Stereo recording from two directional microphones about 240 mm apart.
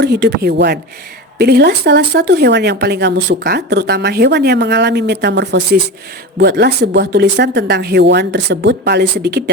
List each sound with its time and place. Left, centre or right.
0.0 s speech: right